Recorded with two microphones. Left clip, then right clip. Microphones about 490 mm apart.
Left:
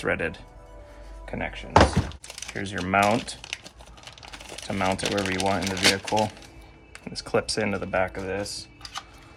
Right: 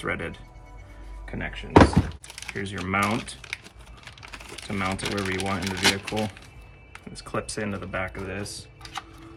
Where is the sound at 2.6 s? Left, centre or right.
Centre.